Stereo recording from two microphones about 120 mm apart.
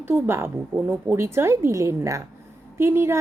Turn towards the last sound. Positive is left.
turn(degrees=-20)  # may be behind; listen again after turning